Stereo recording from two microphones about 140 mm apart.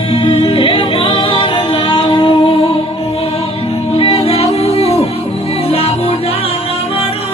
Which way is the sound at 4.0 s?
45° left (ahead or behind).